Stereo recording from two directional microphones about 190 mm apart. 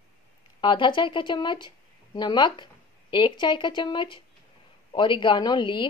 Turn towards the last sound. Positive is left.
turn(degrees=25)  # may be behind; listen again after turning